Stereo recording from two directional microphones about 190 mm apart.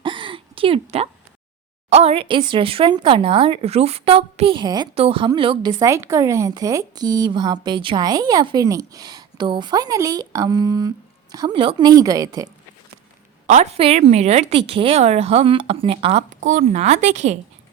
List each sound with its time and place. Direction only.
0.0 s a sound: 25° right (ahead or behind)
1.9 s a woman's voice: 35° right (ahead or behind); by 12.5 s 20° right (ahead or behind)
13.5 s speech: 35° right (ahead or behind)